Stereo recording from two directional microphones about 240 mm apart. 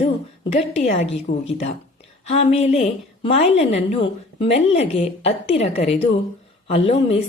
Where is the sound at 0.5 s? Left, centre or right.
Left.